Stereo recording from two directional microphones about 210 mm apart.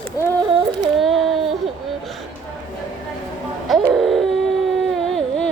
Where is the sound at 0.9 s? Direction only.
Centre (ahead or behind).